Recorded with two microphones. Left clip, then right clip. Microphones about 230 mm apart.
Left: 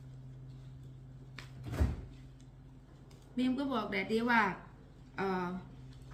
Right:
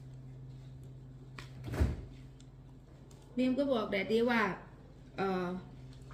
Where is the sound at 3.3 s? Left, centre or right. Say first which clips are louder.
Right 3 dB; centre.